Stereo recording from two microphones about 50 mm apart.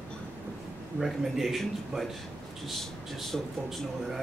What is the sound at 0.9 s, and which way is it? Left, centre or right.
Speech, centre.